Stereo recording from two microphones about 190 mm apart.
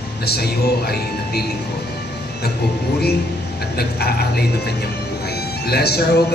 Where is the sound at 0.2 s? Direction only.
55° left (ahead or behind).